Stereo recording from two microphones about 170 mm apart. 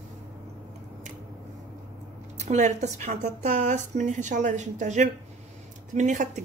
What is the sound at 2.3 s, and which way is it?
A woman's voice, 45° right (ahead or behind).